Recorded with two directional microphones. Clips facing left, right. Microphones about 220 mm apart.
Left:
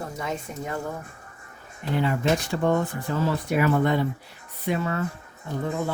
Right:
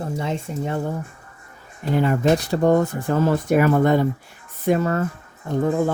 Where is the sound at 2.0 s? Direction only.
40° right (ahead or behind).